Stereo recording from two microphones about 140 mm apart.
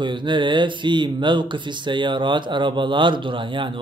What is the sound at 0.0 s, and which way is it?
Speech, 35° right (ahead or behind).